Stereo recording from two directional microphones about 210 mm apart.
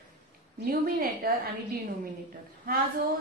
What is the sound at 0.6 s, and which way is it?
Speech, 45° right (ahead or behind).